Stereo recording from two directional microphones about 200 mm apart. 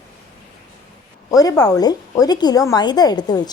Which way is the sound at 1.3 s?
20° left (ahead or behind).